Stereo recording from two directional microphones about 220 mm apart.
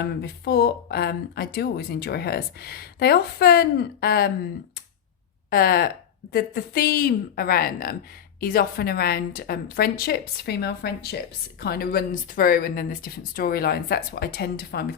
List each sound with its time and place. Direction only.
0.2 s speech: 45° left (ahead or behind)
5.5 s speech: 40° left (ahead or behind)